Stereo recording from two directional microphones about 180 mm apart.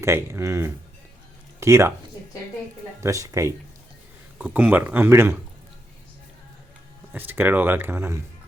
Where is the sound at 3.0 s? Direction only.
15° right (ahead or behind).